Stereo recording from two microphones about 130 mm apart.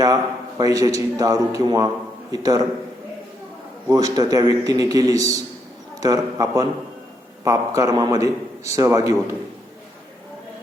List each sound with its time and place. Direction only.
0.6 s a man's voice: 25° right (ahead or behind)
3.8 s a man's voice: 30° right (ahead or behind)